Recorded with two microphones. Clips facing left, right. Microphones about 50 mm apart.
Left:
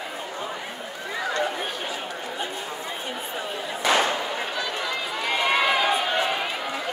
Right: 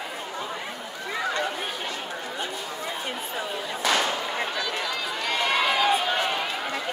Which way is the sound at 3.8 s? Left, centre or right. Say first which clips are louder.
Left 3 dB; left.